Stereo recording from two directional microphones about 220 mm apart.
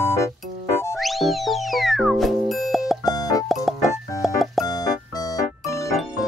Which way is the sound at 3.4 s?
Centre (ahead or behind).